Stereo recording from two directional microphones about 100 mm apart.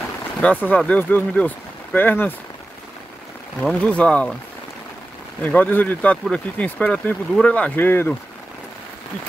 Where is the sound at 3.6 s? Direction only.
10° left (ahead or behind).